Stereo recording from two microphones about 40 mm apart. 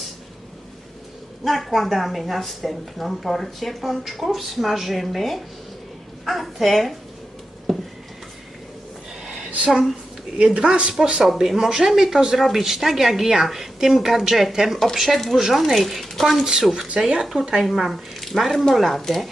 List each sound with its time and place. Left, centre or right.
1.5 s a woman's voice: centre
7.7 s a sound: centre
10.3 s speech: right
11.3 s a woman's voice: centre
17.3 s speech: centre
17.6 s a woman's voice: centre